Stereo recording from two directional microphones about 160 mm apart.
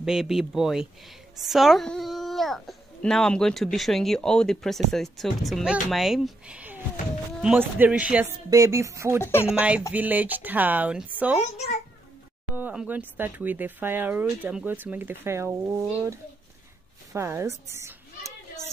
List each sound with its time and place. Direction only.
0.0 s speech: 5° right (ahead or behind)
8.5 s music: 20° right (ahead or behind)
9.2 s speech: 15° left (ahead or behind)
9.6 s speech: 5° right (ahead or behind)
12.5 s a woman's voice: 10° right (ahead or behind)